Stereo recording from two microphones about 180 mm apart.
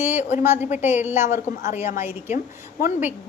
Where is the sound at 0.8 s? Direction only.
10° right (ahead or behind).